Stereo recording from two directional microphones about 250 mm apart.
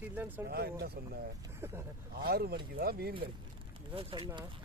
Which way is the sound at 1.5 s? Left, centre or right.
Centre.